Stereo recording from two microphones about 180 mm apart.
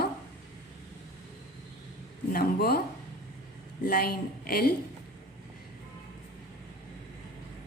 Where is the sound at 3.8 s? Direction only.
55° left (ahead or behind).